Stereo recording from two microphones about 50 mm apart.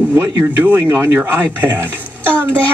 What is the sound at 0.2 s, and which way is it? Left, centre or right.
Speech, right.